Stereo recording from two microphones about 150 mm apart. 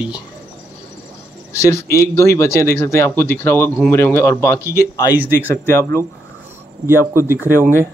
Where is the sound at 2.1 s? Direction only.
20° left (ahead or behind).